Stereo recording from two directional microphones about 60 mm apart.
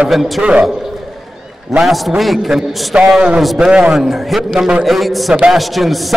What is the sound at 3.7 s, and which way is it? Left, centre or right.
Speech, centre.